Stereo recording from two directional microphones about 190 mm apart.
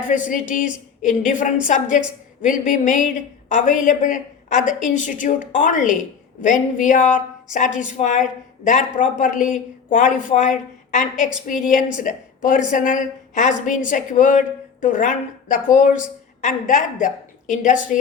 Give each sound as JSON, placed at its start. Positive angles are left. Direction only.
{"t": 0.3, "sound": "a woman's voice", "side_deg": 40}